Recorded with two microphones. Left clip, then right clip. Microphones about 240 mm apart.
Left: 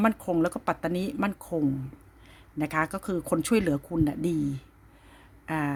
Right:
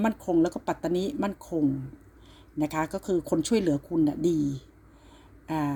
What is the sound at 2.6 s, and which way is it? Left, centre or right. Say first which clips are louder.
Speech: left 1 dB; left.